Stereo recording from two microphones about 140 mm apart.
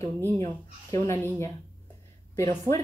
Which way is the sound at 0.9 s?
20° left (ahead or behind).